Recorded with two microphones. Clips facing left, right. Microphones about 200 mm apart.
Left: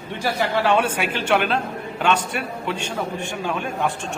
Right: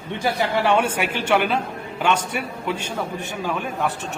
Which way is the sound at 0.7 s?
10° right (ahead or behind).